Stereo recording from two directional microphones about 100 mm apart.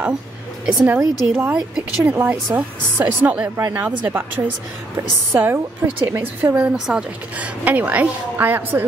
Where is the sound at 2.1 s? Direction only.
25° right (ahead or behind).